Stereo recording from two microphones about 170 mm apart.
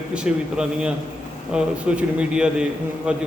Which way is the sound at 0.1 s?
5° right (ahead or behind).